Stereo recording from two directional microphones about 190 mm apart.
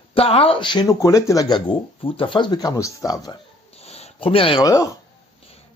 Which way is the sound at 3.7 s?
35° left (ahead or behind).